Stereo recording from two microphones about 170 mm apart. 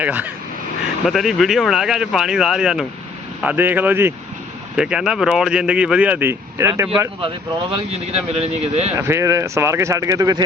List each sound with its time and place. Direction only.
0.0 s speech: 10° right (ahead or behind)
7.2 s speech: 30° right (ahead or behind)
9.0 s speech: 15° right (ahead or behind)